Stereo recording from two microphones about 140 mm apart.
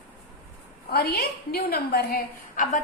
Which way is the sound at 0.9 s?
90° left.